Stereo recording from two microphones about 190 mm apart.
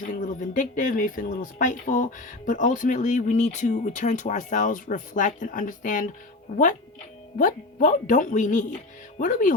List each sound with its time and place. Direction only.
0.2 s speech: 45° left (ahead or behind)
7.3 s speech: 45° left (ahead or behind)